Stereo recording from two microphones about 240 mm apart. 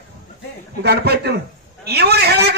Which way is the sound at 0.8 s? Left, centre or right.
Right.